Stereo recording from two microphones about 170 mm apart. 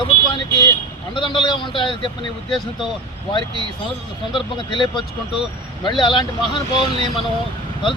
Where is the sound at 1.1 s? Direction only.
30° left (ahead or behind).